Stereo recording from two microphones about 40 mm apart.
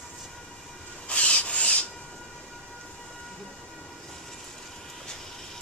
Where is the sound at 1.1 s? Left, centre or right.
Left.